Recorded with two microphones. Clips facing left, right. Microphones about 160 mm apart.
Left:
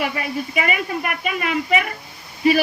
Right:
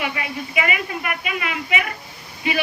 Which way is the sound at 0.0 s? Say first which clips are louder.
Left 3 dB; 40° left (ahead or behind).